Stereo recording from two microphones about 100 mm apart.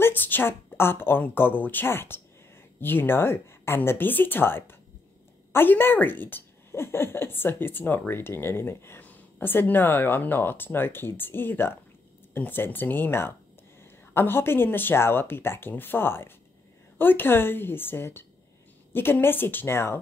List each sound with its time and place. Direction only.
0.0 s a woman's voice: 20° left (ahead or behind)